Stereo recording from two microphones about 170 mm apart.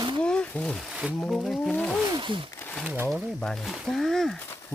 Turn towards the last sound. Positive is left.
turn(degrees=0)  # may be behind; listen again after turning